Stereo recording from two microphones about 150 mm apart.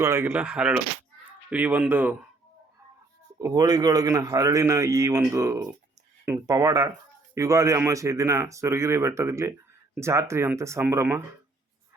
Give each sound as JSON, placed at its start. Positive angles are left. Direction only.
{"t": 0.0, "sound": "speech", "side_deg": -15}
{"t": 3.3, "sound": "a man's voice", "side_deg": -25}